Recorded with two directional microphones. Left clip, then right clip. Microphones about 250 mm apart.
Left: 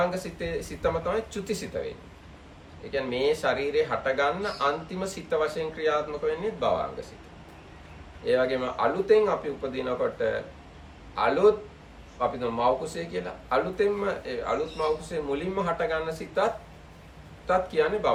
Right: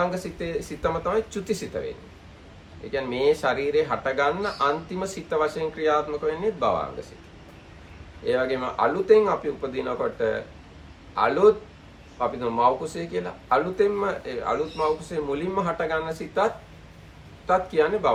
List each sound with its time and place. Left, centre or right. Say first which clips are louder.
0.0 s speech: right 1 dB; centre
2.9 s speech: right 3 dB; centre
8.2 s a man's voice: even; centre